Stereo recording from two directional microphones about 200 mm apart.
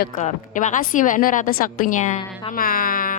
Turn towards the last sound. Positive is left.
turn(degrees=45)  # may be behind; listen again after turning